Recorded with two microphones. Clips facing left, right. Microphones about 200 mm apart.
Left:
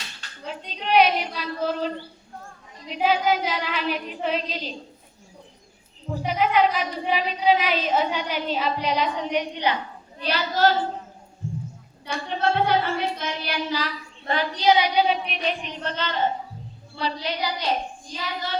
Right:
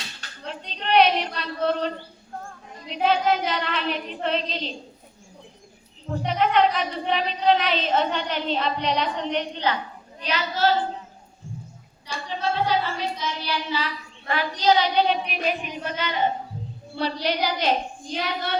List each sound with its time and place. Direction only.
0.4 s a woman's voice: 5° left (ahead or behind)
6.1 s speech: 5° left (ahead or behind)
10.2 s a woman's voice: 40° left (ahead or behind)
12.0 s child singing: 60° left (ahead or behind)
14.6 s a child's voice: 15° left (ahead or behind)
15.0 s speech: centre (ahead or behind)
17.0 s a woman's voice: 65° right (ahead or behind)
18.1 s child singing: 65° right (ahead or behind)